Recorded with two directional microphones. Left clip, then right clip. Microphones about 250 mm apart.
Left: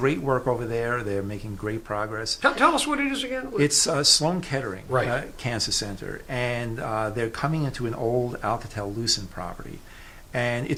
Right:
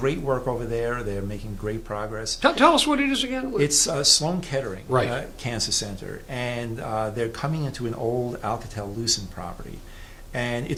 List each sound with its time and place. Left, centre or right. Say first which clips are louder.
0.0 s speech: left 1 dB; left
2.4 s speech: right 3 dB; centre
3.6 s speech: left 1 dB; left